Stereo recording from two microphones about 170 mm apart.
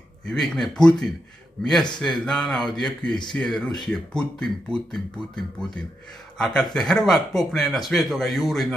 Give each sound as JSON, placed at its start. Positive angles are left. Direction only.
{"t": 0.3, "sound": "speech", "side_deg": 5}